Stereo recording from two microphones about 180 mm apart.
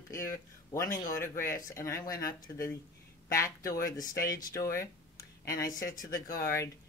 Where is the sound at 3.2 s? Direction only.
15° left (ahead or behind).